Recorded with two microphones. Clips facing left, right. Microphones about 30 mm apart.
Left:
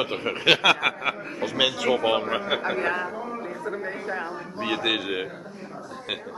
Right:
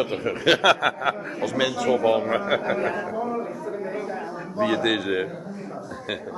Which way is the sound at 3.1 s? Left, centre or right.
Centre.